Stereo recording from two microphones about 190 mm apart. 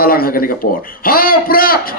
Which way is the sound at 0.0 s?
50° left (ahead or behind).